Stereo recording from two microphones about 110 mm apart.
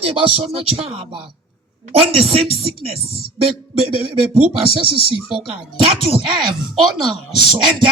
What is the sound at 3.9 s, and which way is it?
Speech, 60° right (ahead or behind).